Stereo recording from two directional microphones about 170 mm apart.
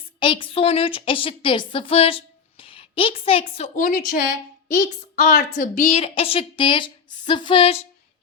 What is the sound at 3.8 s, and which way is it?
A woman's voice, 55° left (ahead or behind).